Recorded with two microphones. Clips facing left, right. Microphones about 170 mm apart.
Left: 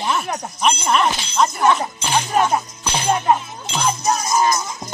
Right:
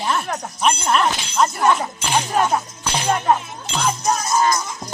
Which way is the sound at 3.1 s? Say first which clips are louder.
Left 1 dB; 10° left (ahead or behind).